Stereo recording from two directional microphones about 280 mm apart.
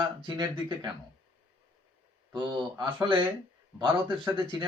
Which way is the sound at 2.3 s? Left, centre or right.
Centre.